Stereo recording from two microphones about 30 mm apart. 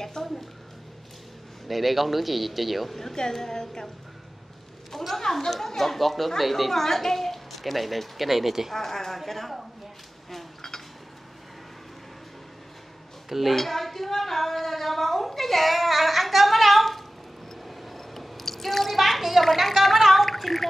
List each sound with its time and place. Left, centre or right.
0.0 s a sound: centre
1.7 s speech: centre
3.3 s a woman's voice: centre
4.9 s a woman's voice: centre
8.7 s a woman's voice: centre
10.3 s a sound: centre
13.3 s speech: centre
13.6 s a woman's voice: centre
17.6 s drip: centre
18.9 s a sound: centre
19.4 s speech: centre
20.2 s gargling: centre